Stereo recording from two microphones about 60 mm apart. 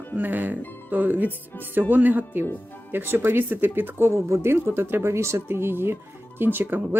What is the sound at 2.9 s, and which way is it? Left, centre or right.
Speech, right.